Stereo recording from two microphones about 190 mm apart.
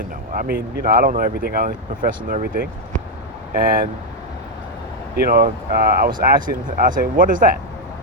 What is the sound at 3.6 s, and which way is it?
Speech, 45° right (ahead or behind).